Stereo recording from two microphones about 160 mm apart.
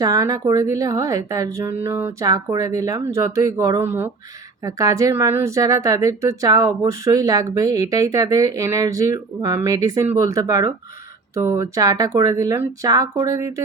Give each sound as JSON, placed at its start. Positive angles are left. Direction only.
{"t": 0.0, "sound": "a woman's voice", "side_deg": -20}